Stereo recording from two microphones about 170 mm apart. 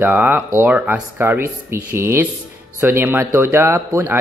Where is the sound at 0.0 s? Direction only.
10° right (ahead or behind).